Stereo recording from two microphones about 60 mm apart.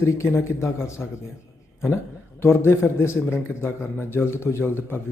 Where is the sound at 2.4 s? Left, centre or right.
Left.